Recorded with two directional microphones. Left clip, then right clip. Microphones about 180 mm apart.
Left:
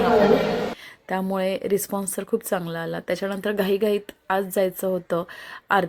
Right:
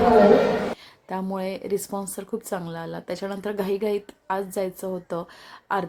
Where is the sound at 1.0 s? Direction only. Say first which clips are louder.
Left 5 dB; 15° left (ahead or behind).